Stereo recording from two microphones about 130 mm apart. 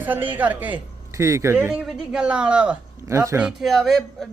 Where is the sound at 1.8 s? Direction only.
5° right (ahead or behind).